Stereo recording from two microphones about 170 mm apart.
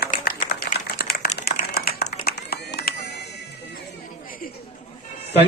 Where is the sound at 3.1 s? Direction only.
80° left.